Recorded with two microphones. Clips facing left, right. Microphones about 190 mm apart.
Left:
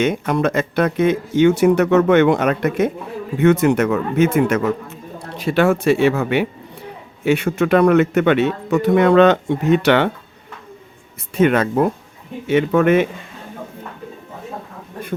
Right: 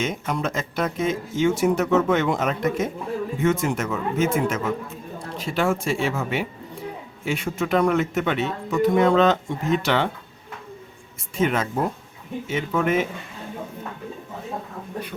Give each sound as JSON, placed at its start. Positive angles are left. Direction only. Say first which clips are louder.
{"t": 0.0, "sound": "speech", "louder": "left 8 dB", "side_deg": 65}
{"t": 11.3, "sound": "speech", "louder": "left 7 dB", "side_deg": 65}